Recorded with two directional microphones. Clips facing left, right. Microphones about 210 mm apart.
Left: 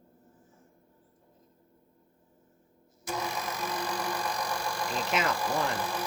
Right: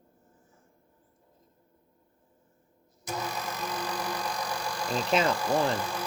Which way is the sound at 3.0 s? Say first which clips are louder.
Even; 5° left (ahead or behind).